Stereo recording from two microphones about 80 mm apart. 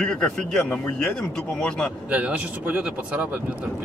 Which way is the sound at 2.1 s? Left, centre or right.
Centre.